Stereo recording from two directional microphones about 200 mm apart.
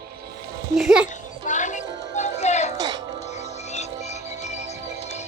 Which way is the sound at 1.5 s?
40° left (ahead or behind).